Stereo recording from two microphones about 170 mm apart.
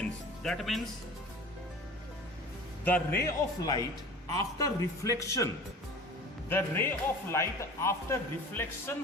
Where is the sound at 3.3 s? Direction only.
20° left (ahead or behind).